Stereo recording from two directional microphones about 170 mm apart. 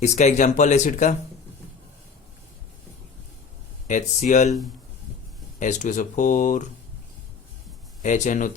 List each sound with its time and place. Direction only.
0.0 s speech: 45° left (ahead or behind)
3.8 s speech: 45° left (ahead or behind)
5.5 s speech: 45° left (ahead or behind)
8.0 s speech: 45° left (ahead or behind)